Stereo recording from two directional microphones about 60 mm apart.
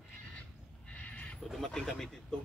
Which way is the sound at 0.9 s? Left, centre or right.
Left.